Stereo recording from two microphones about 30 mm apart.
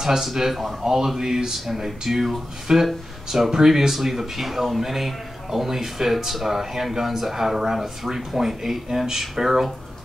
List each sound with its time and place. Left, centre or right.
0.0 s speech: centre
0.8 s speech: centre
2.7 s speech: right
3.3 s speech: centre